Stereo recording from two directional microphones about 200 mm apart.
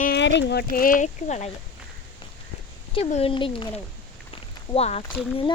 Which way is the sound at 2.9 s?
30° left (ahead or behind).